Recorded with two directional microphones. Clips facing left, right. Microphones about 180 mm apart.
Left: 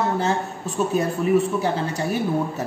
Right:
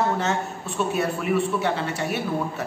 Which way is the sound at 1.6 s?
35° left (ahead or behind).